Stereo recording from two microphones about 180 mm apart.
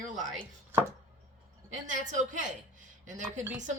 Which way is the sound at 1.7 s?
45° right (ahead or behind).